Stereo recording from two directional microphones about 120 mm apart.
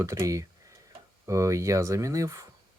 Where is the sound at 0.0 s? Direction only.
25° right (ahead or behind).